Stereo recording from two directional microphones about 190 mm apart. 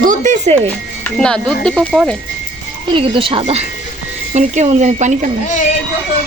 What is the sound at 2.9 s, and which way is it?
Speech, 30° right (ahead or behind).